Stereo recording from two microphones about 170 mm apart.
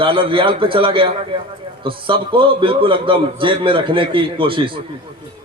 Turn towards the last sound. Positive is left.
turn(degrees=-30)  # may be behind; listen again after turning